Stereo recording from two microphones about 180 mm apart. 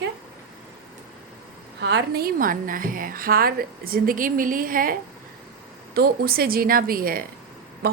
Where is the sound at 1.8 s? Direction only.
75° right (ahead or behind).